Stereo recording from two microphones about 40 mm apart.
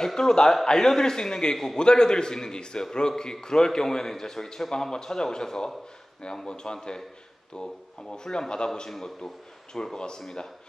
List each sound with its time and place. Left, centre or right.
0.0 s a man's voice: centre
8.1 s a man's voice: centre